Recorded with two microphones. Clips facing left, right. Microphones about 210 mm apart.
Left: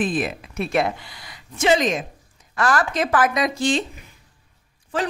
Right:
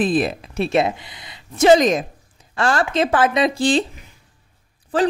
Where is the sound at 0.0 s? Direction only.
35° right (ahead or behind).